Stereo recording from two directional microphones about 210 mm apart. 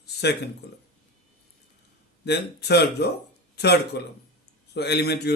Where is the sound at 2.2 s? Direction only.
50° left (ahead or behind).